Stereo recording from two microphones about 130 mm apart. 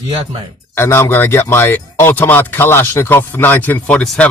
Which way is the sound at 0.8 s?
20° left (ahead or behind).